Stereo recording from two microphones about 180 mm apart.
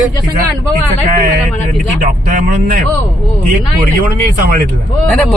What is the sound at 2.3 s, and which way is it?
Speech, 50° right (ahead or behind).